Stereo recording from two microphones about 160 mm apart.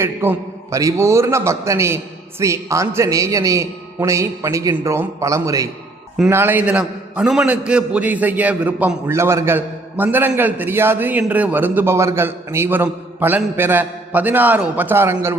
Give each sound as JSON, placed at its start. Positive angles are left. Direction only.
{"t": 0.0, "sound": "a man's voice", "side_deg": -15}